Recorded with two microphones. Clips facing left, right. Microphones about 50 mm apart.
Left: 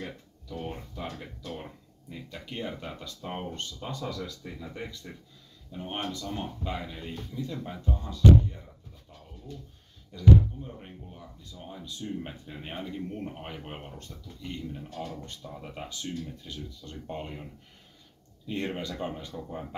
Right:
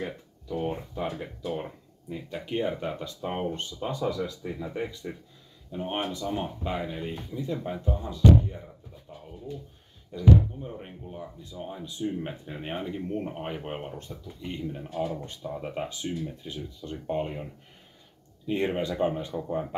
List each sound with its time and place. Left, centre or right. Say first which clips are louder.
0.0 s speech: right 5 dB; centre